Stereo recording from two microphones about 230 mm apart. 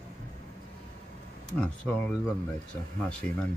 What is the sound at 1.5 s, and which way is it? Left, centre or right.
Speech, centre.